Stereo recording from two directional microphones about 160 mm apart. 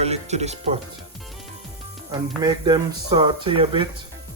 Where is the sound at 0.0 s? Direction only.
40° right (ahead or behind).